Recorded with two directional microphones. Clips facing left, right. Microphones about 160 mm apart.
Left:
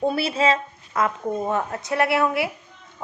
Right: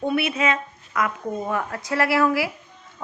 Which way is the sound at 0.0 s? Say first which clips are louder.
Left 1 dB; 30° left (ahead or behind).